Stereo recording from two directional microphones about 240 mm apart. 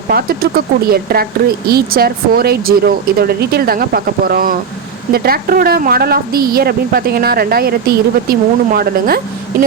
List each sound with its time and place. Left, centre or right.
0.1 s a woman's voice: right